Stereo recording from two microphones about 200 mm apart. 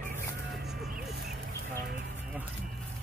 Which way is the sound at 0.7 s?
50° right (ahead or behind).